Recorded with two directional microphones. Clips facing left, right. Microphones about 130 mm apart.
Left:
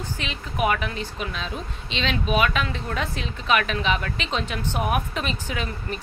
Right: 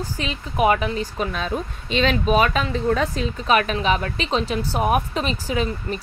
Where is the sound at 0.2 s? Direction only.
35° right (ahead or behind).